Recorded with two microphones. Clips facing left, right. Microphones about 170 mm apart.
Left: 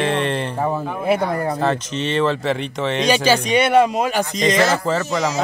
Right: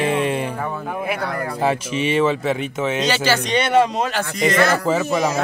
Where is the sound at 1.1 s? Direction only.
30° left (ahead or behind).